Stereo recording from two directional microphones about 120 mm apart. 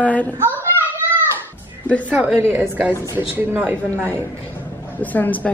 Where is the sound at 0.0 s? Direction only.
10° left (ahead or behind).